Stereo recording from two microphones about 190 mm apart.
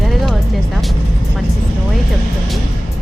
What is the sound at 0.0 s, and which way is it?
Music, centre (ahead or behind).